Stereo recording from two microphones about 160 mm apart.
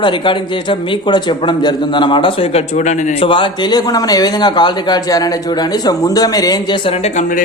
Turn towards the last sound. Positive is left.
turn(degrees=45)  # may be behind; listen again after turning